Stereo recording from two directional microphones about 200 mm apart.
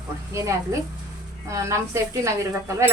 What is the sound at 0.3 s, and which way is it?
Speech, 15° right (ahead or behind).